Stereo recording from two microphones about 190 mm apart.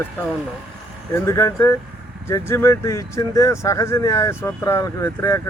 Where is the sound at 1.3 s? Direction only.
15° left (ahead or behind).